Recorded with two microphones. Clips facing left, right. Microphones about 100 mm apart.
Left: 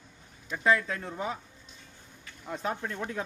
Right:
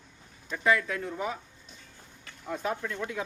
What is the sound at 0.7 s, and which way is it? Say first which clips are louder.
Speech: even; 25° left (ahead or behind).